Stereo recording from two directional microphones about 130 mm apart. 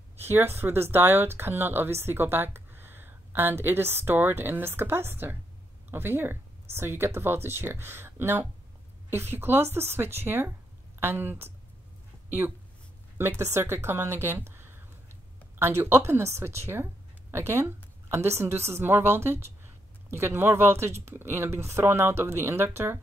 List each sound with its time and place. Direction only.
0.2 s a woman's voice: 15° right (ahead or behind)